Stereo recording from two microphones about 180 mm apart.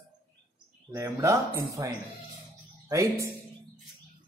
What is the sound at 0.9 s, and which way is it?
Speech, 15° right (ahead or behind).